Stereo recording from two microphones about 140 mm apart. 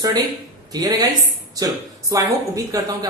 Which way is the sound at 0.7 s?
30° right (ahead or behind).